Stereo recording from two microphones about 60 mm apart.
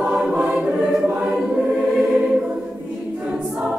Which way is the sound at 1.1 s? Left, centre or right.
Right.